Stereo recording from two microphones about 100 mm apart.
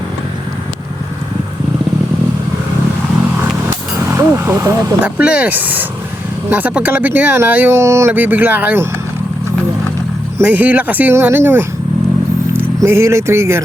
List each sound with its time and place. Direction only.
3.7 s a sound: 25° right (ahead or behind)
5.0 s speech: 10° right (ahead or behind)
10.4 s speech: 15° right (ahead or behind)